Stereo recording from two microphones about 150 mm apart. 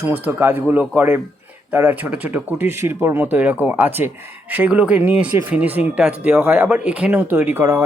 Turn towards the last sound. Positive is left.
turn(degrees=-15)  # may be behind; listen again after turning